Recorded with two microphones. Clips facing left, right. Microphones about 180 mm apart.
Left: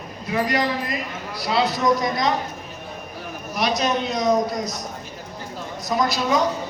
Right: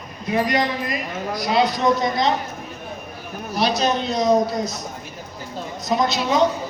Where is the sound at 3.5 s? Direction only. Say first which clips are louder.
Right 2 dB; 30° right (ahead or behind).